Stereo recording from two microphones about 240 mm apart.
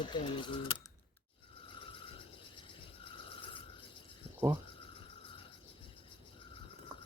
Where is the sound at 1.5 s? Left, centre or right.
Left.